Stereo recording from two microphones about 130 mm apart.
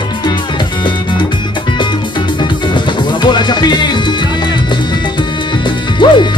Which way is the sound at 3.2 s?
35° left (ahead or behind).